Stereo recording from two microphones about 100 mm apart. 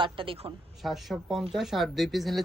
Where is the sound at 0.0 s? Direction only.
60° right (ahead or behind).